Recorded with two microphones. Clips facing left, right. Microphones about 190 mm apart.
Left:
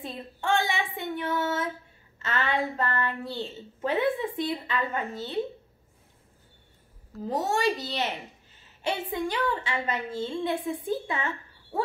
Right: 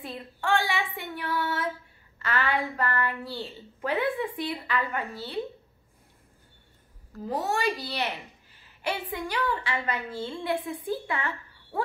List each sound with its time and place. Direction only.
0.0 s a woman's voice: 25° left (ahead or behind)
7.2 s a woman's voice: 25° left (ahead or behind)